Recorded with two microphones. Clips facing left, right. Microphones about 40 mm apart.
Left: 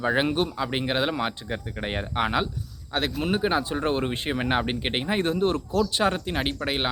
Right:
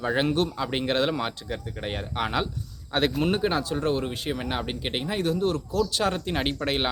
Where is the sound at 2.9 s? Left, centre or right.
Centre.